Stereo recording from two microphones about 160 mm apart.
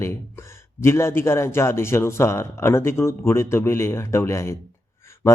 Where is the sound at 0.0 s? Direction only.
15° left (ahead or behind).